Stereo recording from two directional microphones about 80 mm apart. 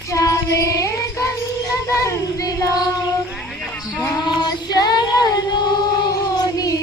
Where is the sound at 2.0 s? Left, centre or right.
Left.